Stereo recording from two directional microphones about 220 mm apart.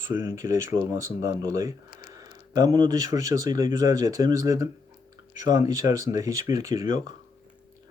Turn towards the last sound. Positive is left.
turn(degrees=-15)  # may be behind; listen again after turning